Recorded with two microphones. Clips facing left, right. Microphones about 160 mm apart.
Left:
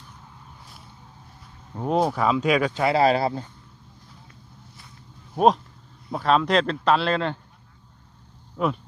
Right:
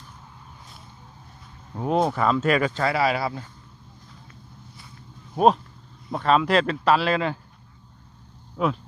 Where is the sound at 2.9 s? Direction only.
40° left (ahead or behind).